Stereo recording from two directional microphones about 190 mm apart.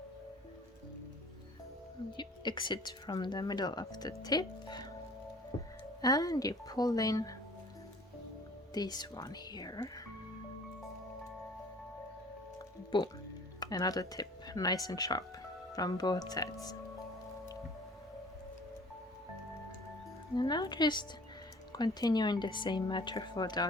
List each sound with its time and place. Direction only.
2.1 s speech: 25° left (ahead or behind)
6.0 s speech: 20° left (ahead or behind)
8.7 s speech: 20° left (ahead or behind)
12.9 s speech: 25° left (ahead or behind)
20.3 s speech: 20° left (ahead or behind)